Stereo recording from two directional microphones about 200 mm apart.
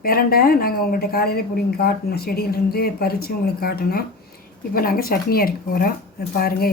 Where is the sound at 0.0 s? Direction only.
50° left (ahead or behind).